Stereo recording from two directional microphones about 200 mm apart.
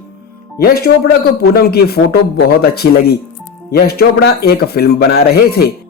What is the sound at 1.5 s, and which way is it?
Speech, 50° left (ahead or behind).